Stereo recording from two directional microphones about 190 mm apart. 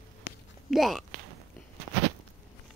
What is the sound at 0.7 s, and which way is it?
Speech, centre (ahead or behind).